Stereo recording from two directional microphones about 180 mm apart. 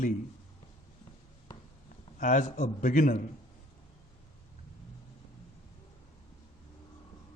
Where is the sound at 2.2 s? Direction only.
45° left (ahead or behind).